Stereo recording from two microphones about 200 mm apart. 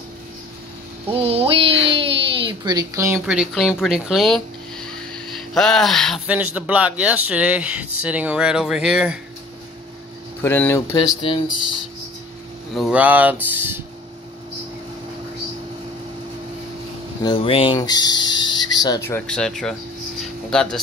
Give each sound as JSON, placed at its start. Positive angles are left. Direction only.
{"t": 1.1, "sound": "a sound", "side_deg": -30}
{"t": 1.9, "sound": "speech", "side_deg": -25}
{"t": 10.4, "sound": "speech", "side_deg": 10}
{"t": 11.2, "sound": "speech", "side_deg": 25}
{"t": 12.7, "sound": "speech", "side_deg": -5}
{"t": 17.2, "sound": "speech", "side_deg": 25}